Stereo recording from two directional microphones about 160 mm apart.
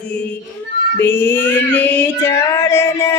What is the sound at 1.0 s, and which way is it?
Female singing, 15° left (ahead or behind).